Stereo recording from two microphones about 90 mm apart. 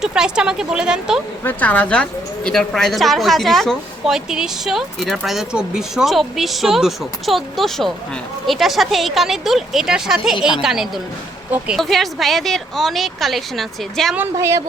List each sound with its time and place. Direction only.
0.0 s a woman's voice: 10° right (ahead or behind)
1.5 s speech: 15° left (ahead or behind)
14.3 s speech: 35° right (ahead or behind)